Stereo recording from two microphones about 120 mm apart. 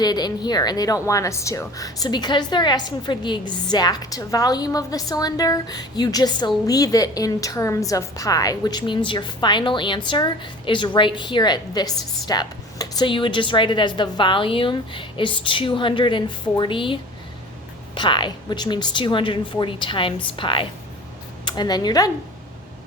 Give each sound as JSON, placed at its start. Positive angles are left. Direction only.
{"t": 0.0, "sound": "a woman's voice", "side_deg": 35}